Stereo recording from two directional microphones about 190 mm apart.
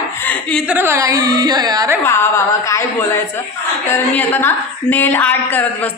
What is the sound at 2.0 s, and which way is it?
A woman's voice, 15° left (ahead or behind).